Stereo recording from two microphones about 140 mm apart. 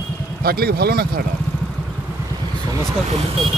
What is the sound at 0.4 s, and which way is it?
Speech, 90° right.